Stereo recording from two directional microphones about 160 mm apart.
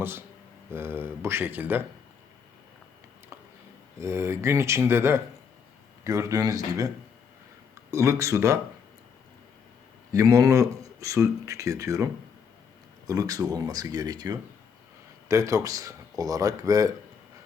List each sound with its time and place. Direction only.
0.7 s speech: 15° right (ahead or behind)
4.0 s speech: 15° right (ahead or behind)
10.1 s speech: 20° right (ahead or behind)